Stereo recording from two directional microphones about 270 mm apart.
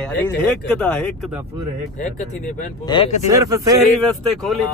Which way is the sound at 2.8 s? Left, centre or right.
Centre.